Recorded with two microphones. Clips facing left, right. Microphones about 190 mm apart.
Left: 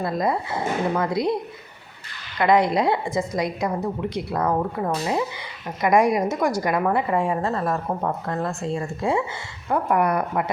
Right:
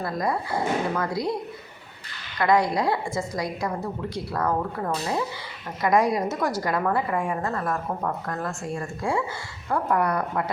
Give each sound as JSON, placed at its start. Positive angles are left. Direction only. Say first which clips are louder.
{"t": 0.0, "sound": "a woman's voice", "louder": "left 3 dB", "side_deg": 20}
{"t": 2.4, "sound": "a woman's voice", "louder": "left 3 dB", "side_deg": 20}